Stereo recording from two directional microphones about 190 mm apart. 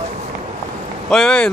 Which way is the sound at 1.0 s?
5° left (ahead or behind).